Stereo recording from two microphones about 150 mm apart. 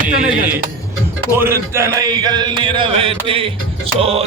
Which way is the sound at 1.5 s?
20° right (ahead or behind).